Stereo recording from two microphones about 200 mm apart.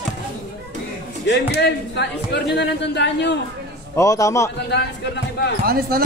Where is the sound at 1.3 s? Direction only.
55° left (ahead or behind).